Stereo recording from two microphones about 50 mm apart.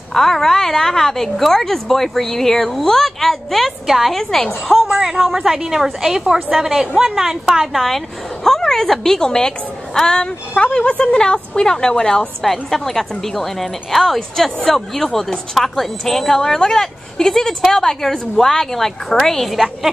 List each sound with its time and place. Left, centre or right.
0.1 s a woman's voice: centre
7.7 s a woman's voice: centre